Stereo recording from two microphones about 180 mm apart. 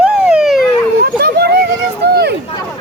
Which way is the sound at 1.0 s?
65° right (ahead or behind).